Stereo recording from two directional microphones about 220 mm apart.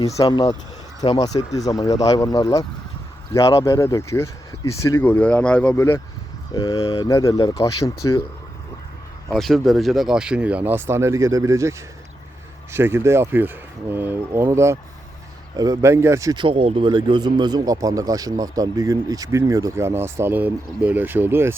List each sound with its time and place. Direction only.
0.0 s speech: 15° left (ahead or behind)
9.3 s speech: centre (ahead or behind)
12.7 s speech: 10° right (ahead or behind)